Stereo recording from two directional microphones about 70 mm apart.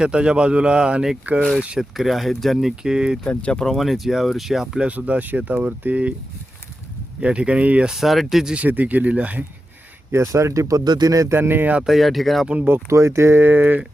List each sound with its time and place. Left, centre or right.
0.0 s speech: centre
1.8 s speech: centre
3.2 s speech: centre
3.8 s speech: centre
4.9 s speech: right
7.2 s speech: centre
7.9 s speech: centre
8.5 s speech: right
10.1 s speech: right
10.8 s a man's voice: right
11.3 s speech: right
11.9 s speech: centre
12.6 s speech: right